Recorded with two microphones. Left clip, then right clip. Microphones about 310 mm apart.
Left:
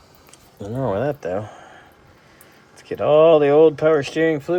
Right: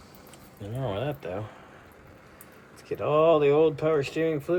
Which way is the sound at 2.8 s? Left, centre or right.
Left.